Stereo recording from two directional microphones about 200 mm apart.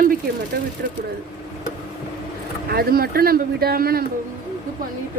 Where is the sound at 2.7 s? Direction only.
50° right (ahead or behind).